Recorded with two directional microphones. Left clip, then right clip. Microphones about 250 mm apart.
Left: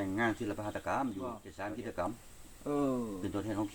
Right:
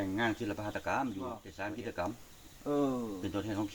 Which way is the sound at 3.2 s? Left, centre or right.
Centre.